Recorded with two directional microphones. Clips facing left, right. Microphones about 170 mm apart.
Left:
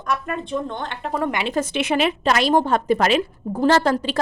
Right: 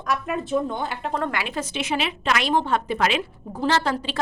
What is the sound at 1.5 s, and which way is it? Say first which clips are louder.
A woman's voice: left 5 dB; 55° left (ahead or behind).